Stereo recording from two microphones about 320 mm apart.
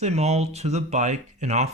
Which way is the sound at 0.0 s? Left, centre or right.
Centre.